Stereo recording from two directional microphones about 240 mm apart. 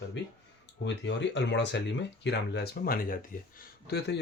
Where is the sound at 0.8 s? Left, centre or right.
Left.